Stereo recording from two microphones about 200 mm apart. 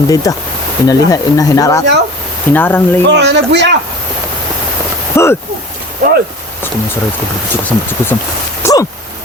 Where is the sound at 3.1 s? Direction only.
60° right (ahead or behind).